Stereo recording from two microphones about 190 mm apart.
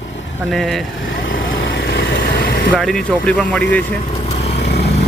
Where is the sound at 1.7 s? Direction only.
60° left (ahead or behind).